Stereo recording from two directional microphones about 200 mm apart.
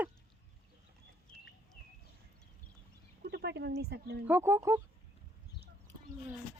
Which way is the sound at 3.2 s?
50° right (ahead or behind).